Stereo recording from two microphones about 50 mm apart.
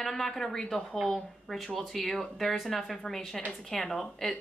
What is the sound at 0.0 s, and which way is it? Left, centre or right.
A woman's voice, centre.